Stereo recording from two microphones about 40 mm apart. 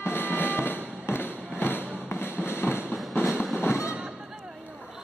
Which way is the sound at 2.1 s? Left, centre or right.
Left.